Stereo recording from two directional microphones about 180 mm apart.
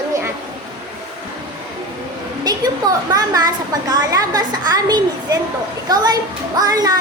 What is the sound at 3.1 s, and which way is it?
A woman's voice, 20° right (ahead or behind).